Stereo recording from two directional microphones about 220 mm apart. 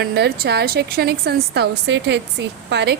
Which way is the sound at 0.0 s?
45° right (ahead or behind).